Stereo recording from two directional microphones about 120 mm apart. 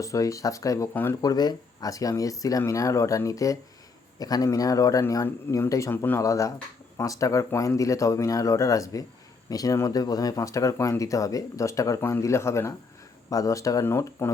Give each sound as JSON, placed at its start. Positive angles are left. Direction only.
{"t": 0.0, "sound": "speech", "side_deg": 30}